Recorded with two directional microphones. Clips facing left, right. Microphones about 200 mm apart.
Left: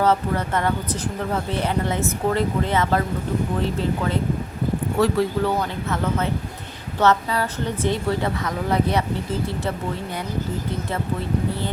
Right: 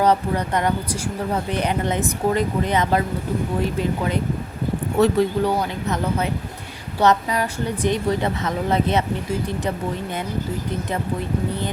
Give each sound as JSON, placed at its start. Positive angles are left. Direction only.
{"t": 0.0, "sound": "speech", "side_deg": -15}